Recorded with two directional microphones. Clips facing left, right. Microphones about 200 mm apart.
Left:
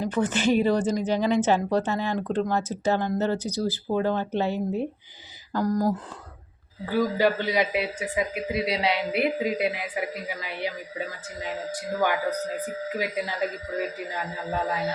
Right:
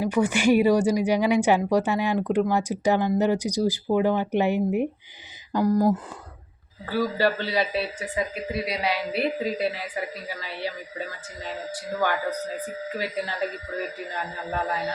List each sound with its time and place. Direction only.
0.0 s speech: 10° right (ahead or behind)
6.8 s a man's voice: 15° left (ahead or behind)
8.5 s a man's voice: 25° left (ahead or behind)
12.5 s a man's voice: 10° left (ahead or behind)